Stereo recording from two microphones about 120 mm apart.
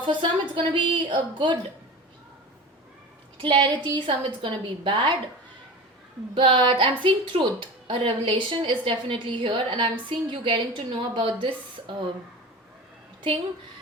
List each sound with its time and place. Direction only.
0.0 s a woman's voice: 40° right (ahead or behind)
3.4 s a woman's voice: 40° right (ahead or behind)
6.3 s a woman's voice: 45° right (ahead or behind)